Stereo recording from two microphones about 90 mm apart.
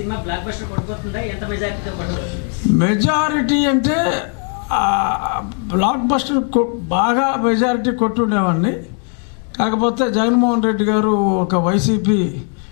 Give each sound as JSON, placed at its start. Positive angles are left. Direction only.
{"t": 0.1, "sound": "a man's voice", "side_deg": 15}